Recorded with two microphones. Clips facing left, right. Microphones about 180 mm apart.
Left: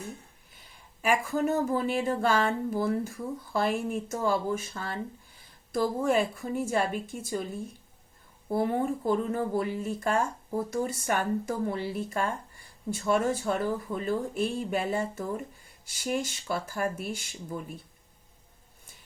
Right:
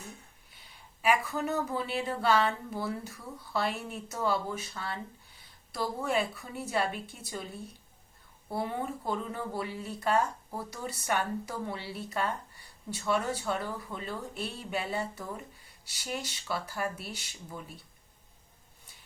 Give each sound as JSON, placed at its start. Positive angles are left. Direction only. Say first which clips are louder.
{"t": 0.5, "sound": "speech", "louder": "left 1 dB", "side_deg": 45}